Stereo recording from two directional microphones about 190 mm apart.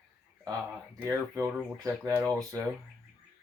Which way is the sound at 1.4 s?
20° right (ahead or behind).